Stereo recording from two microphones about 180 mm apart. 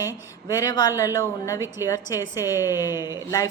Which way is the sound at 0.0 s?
20° left (ahead or behind).